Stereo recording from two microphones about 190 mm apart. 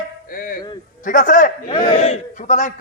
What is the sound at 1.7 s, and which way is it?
A man's voice, 25° left (ahead or behind).